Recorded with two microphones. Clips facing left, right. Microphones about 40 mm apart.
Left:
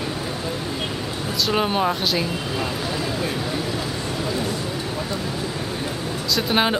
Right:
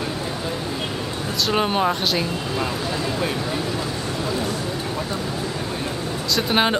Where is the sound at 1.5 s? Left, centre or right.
Centre.